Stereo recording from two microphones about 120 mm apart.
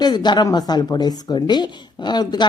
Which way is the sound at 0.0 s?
35° left (ahead or behind).